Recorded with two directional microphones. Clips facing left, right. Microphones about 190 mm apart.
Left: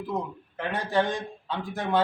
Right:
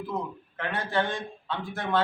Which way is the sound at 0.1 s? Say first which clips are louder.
Left 1 dB; 15° left (ahead or behind).